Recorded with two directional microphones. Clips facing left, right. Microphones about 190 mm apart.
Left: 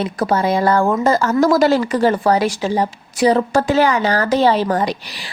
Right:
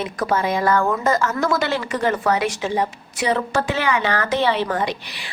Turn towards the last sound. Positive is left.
turn(degrees=40)  # may be behind; listen again after turning